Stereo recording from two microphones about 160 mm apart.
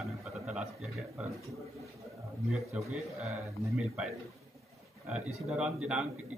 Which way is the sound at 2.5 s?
Centre (ahead or behind).